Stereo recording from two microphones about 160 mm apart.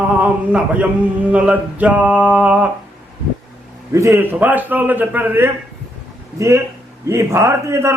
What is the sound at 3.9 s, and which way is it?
A man's voice, 20° right (ahead or behind).